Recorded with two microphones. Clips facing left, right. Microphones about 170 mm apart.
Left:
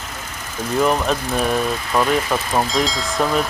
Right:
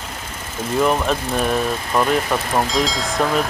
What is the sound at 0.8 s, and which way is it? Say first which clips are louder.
Speech: even; centre (ahead or behind).